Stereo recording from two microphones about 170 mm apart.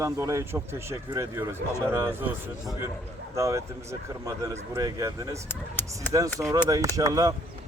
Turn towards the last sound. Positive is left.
turn(degrees=-20)  # may be behind; listen again after turning